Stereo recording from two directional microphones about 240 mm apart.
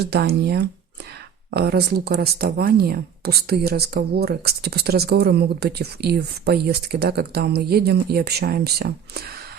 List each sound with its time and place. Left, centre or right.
0.0 s speech: right